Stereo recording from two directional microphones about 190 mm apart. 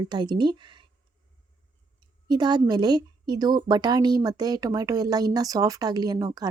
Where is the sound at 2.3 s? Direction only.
20° right (ahead or behind).